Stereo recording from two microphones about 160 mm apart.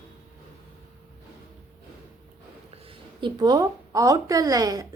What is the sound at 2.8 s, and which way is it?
A woman's voice, 30° right (ahead or behind).